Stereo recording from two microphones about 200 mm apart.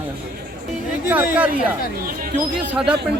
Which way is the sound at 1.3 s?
10° right (ahead or behind).